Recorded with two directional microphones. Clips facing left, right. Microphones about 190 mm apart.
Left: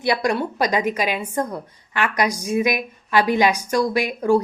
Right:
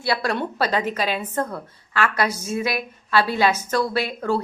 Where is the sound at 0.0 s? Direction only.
15° left (ahead or behind).